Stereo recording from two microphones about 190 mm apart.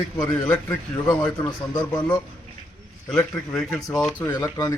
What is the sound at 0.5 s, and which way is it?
Speech, 20° left (ahead or behind).